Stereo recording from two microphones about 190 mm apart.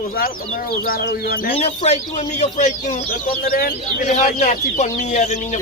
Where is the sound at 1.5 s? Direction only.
35° left (ahead or behind).